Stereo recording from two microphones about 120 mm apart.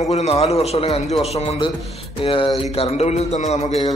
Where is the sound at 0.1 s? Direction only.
65° left (ahead or behind).